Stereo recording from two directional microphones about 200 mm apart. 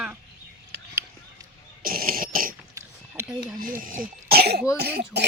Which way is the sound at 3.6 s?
45° right (ahead or behind).